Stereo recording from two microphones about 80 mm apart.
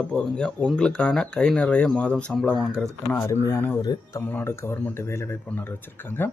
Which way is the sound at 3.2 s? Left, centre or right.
Left.